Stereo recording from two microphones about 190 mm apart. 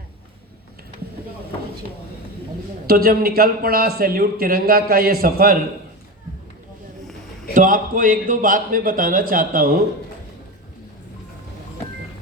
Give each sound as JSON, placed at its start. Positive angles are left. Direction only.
{"t": 2.8, "sound": "a man's voice", "side_deg": -50}
{"t": 7.5, "sound": "a man's voice", "side_deg": -45}